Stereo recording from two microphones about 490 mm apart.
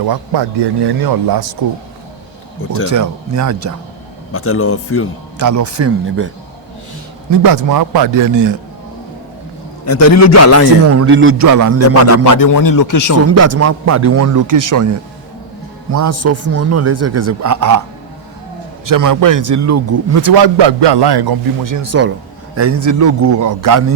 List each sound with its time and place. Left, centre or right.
0.0 s speech: right
2.9 s a man's voice: right
4.3 s speech: left
5.4 s a man's voice: right
7.3 s a man's voice: right
9.8 s a man's voice: left
10.8 s a man's voice: right
11.4 s a man's voice: right
12.0 s a man's voice: left
13.2 s a man's voice: right
18.9 s a man's voice: right